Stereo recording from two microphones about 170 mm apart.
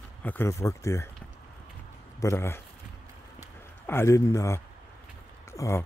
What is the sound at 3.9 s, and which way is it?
A man's voice, 15° left (ahead or behind).